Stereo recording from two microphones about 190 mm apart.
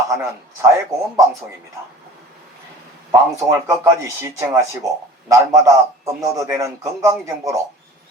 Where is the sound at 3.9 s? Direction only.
15° right (ahead or behind).